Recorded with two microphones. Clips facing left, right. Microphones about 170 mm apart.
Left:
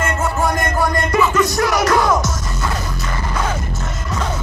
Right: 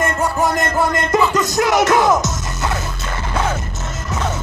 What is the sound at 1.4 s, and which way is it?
Music, 20° right (ahead or behind).